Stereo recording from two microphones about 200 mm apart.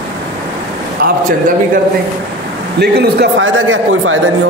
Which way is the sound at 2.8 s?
55° right (ahead or behind).